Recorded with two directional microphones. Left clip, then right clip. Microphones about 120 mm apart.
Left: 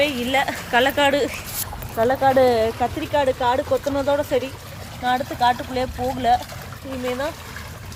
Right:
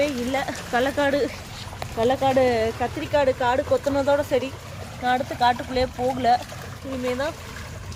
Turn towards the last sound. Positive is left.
turn(degrees=-5)  # may be behind; listen again after turning